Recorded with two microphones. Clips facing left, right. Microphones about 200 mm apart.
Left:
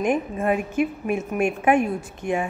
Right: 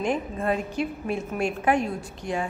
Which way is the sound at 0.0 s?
15° left (ahead or behind).